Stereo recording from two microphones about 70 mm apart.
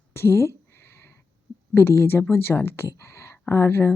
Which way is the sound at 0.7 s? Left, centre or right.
Left.